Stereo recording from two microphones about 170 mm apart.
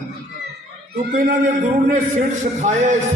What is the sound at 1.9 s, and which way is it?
A man's voice, 45° right (ahead or behind).